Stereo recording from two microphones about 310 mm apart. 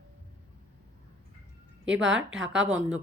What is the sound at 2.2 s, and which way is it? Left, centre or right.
Speech, centre.